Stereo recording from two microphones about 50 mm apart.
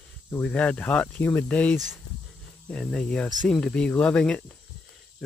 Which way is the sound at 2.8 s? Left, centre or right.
Centre.